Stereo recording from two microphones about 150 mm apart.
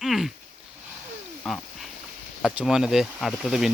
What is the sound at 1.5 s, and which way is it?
Speech, centre (ahead or behind).